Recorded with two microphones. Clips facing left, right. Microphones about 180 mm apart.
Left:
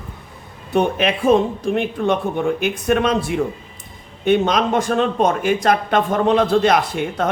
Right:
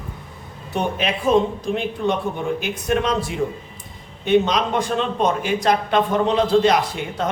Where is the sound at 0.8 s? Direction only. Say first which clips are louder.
Left 5 dB; 55° left (ahead or behind).